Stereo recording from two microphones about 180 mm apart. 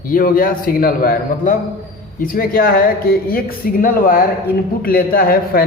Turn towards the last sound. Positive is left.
turn(degrees=55)  # may be behind; listen again after turning